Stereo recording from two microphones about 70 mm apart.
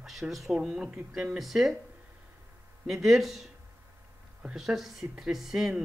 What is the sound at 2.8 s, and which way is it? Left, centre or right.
Speech, centre.